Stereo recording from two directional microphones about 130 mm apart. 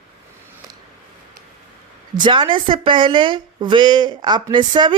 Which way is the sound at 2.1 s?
35° right (ahead or behind).